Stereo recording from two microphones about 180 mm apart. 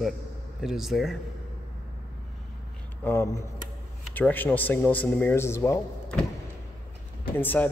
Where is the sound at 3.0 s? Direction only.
15° left (ahead or behind).